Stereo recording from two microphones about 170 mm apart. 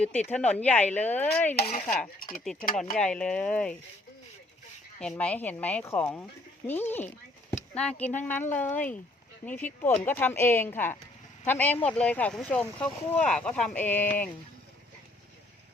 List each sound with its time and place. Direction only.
0.3 s speech: 5° left (ahead or behind)
1.5 s stir: 60° left (ahead or behind)
1.8 s speech: 5° left (ahead or behind)
2.1 s stir: 55° left (ahead or behind)
2.4 s speech: centre (ahead or behind)
4.9 s speech: 5° left (ahead or behind)
8.2 s speech: 10° left (ahead or behind)